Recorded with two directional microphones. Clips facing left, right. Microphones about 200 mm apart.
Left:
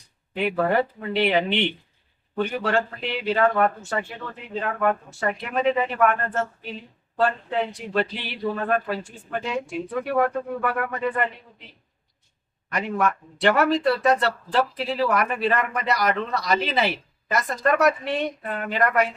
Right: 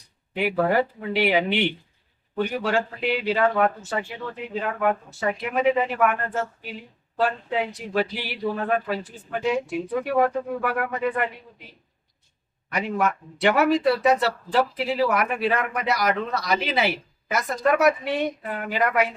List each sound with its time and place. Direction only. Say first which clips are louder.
0.3 s speech: even; 5° right (ahead or behind)
12.7 s speech: even; centre (ahead or behind)